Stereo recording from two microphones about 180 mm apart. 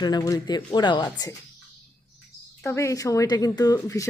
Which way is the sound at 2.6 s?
15° left (ahead or behind).